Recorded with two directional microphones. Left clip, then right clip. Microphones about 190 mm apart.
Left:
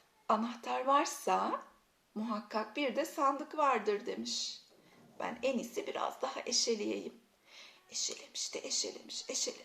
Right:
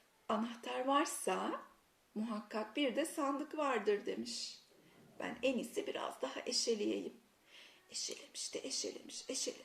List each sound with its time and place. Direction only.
0.3 s speech: 20° right (ahead or behind)